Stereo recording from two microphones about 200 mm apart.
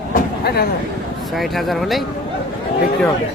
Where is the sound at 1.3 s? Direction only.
Centre (ahead or behind).